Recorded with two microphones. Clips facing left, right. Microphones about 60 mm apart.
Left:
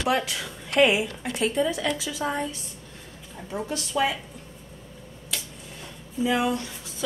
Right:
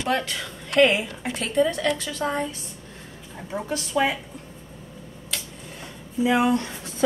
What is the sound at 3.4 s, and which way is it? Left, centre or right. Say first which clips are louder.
Speech: right 2 dB; right.